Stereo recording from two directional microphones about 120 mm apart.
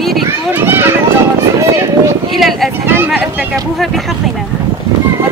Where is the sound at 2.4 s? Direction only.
Centre (ahead or behind).